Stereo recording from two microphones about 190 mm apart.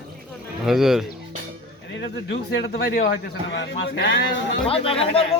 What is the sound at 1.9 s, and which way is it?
Speech, 65° left (ahead or behind).